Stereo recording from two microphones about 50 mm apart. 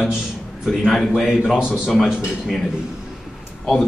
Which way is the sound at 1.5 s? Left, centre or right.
Centre.